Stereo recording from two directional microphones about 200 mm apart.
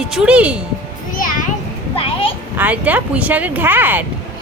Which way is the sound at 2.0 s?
25° left (ahead or behind).